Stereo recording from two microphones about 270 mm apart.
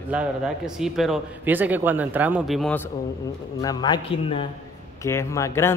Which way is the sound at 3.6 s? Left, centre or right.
Centre.